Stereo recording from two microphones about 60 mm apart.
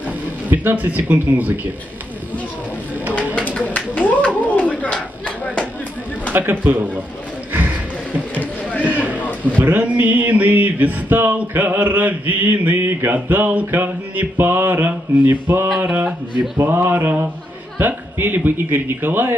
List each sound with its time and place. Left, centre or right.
0.5 s music: right
3.3 s a sound: left
6.3 s mantra: right
9.6 s music: right
11.3 s mantra: right
15.8 s music: right
16.5 s mantra: right